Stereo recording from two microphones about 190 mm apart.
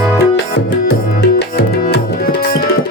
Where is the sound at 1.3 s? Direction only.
60° left (ahead or behind).